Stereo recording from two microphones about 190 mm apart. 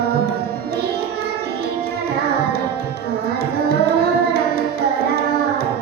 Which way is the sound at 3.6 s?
55° right (ahead or behind).